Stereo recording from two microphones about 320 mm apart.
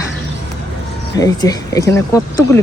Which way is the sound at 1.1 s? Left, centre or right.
Centre.